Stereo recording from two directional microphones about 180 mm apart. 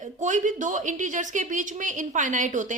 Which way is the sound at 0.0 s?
45° right (ahead or behind).